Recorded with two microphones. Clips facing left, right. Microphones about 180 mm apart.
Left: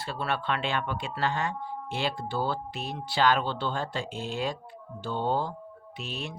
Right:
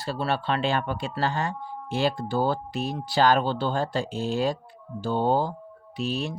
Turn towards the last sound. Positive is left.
turn(degrees=-35)  # may be behind; listen again after turning